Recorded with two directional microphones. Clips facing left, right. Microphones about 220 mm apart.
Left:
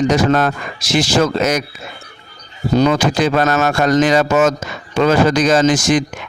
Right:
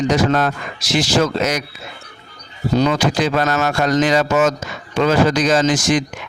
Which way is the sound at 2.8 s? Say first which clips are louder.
Left 3 dB; 50° left (ahead or behind).